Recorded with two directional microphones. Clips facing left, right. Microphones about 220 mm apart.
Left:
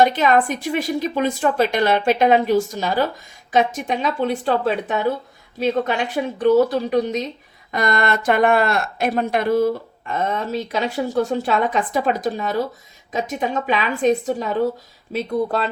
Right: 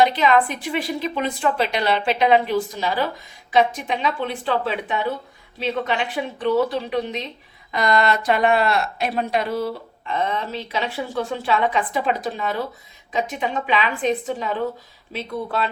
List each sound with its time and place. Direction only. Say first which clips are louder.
0.0 s speech: left 1 dB; 45° left (ahead or behind)